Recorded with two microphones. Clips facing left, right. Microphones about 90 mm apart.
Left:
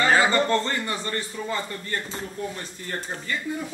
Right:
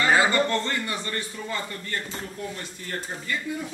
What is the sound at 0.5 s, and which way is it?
Speech, 35° left (ahead or behind).